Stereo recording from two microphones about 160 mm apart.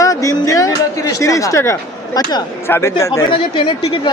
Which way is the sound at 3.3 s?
30° left (ahead or behind).